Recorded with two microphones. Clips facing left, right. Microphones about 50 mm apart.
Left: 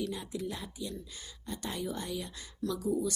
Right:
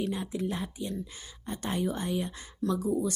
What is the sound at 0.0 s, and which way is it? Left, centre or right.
Speech, right.